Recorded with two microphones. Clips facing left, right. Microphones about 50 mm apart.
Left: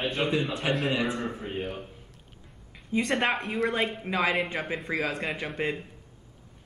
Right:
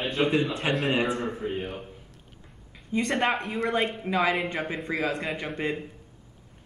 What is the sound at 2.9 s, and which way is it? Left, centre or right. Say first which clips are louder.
Speech: even; centre.